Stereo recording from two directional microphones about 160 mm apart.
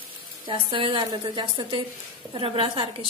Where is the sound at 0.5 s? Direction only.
30° right (ahead or behind).